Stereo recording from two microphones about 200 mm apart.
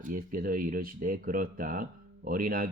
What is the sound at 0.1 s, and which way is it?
Speech, 45° right (ahead or behind).